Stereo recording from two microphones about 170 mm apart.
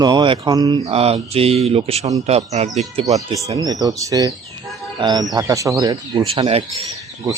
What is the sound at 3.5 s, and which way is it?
Speech, 20° right (ahead or behind).